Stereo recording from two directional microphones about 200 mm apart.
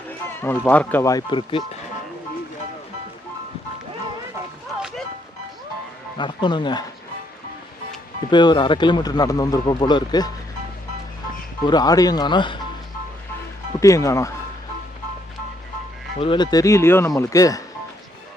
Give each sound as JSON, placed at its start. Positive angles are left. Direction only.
{"t": 0.3, "sound": "speech", "side_deg": 10}
{"t": 6.1, "sound": "speech", "side_deg": 25}
{"t": 8.3, "sound": "speech", "side_deg": 20}
{"t": 11.6, "sound": "speech", "side_deg": 20}
{"t": 13.7, "sound": "speech", "side_deg": 15}
{"t": 16.1, "sound": "speech", "side_deg": 25}